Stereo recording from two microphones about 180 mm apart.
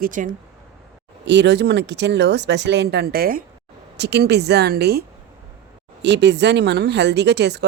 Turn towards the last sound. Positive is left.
turn(degrees=-70)  # may be behind; listen again after turning